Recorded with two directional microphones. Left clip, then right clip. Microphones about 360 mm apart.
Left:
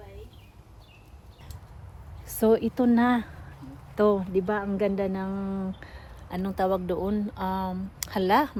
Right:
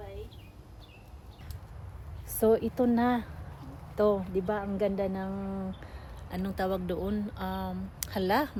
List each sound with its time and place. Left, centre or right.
2.2 s speech: left